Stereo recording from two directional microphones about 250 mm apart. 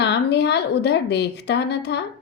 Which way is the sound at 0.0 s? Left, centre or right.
Left.